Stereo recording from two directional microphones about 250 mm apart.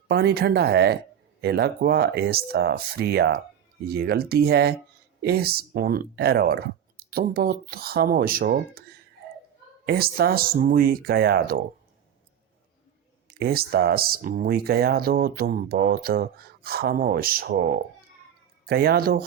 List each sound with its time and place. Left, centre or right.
0.1 s speech: right
13.2 s speech: right